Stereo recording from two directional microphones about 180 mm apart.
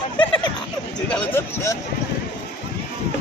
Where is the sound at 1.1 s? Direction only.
15° left (ahead or behind).